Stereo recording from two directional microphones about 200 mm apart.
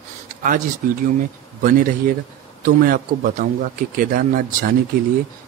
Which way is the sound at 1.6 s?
40° right (ahead or behind).